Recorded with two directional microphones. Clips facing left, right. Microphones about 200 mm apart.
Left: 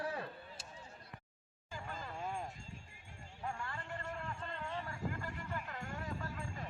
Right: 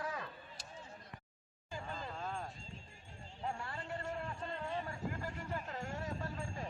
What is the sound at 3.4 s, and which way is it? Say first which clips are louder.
Clip-clop: right 1 dB; 30° right (ahead or behind).